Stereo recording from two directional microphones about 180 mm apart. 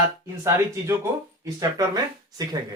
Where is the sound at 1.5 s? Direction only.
20° right (ahead or behind).